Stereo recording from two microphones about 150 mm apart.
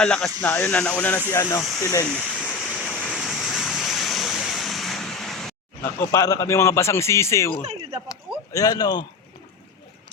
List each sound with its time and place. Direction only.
0.0 s a man's voice: 5° left (ahead or behind)
2.0 s a sound: 5° left (ahead or behind)
2.7 s waves: 5° left (ahead or behind)
5.8 s a man's voice: 20° left (ahead or behind)
7.6 s speech: 40° right (ahead or behind)
8.5 s a man's voice: 25° left (ahead or behind)